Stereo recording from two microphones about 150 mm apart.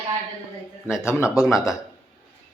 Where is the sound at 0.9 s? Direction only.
20° left (ahead or behind).